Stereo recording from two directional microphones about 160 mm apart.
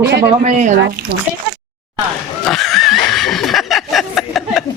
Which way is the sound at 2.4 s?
Centre (ahead or behind).